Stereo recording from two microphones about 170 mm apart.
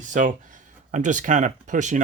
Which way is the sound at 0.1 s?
50° right (ahead or behind).